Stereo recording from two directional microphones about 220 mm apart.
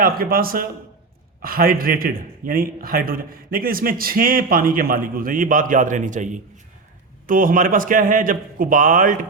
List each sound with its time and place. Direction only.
0.0 s a man's voice: 40° right (ahead or behind)